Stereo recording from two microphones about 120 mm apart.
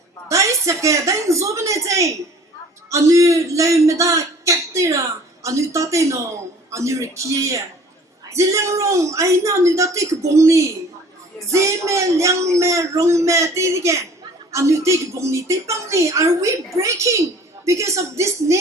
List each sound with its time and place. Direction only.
0.3 s a man's voice: 25° right (ahead or behind)